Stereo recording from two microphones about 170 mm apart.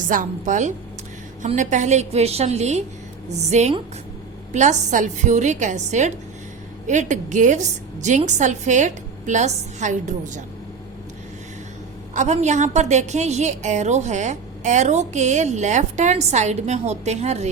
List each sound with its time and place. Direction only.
0.1 s a woman's voice: 50° right (ahead or behind)
12.1 s a woman's voice: 45° right (ahead or behind)